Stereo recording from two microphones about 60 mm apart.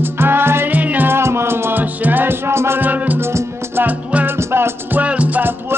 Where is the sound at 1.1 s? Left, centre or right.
Right.